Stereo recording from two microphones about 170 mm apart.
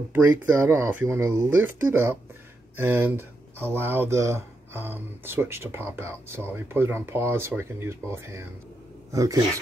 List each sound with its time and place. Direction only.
0.1 s speech: 10° right (ahead or behind)